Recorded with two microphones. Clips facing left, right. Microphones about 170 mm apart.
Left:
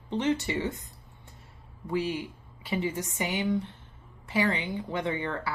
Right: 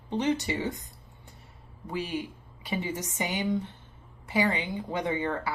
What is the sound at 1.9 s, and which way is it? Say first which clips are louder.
A woman's voice: left 3 dB; 15° right (ahead or behind).